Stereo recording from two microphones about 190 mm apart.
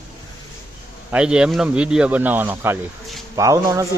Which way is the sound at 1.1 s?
5° right (ahead or behind).